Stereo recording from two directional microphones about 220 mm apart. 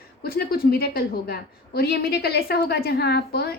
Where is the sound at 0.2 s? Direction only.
45° left (ahead or behind).